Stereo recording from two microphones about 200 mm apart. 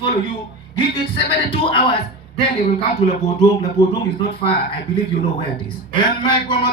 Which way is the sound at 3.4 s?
20° left (ahead or behind).